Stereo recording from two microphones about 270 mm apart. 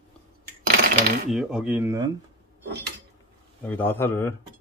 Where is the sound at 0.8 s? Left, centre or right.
Right.